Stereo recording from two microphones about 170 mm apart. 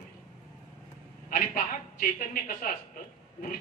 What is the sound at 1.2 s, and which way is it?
A woman's voice, 55° left (ahead or behind).